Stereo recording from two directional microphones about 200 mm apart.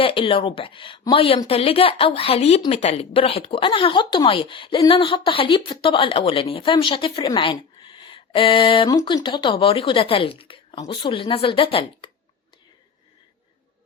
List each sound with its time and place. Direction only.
0.0 s a woman's voice: 25° left (ahead or behind)